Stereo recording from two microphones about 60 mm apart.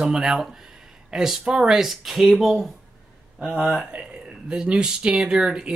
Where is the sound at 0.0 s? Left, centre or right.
Centre.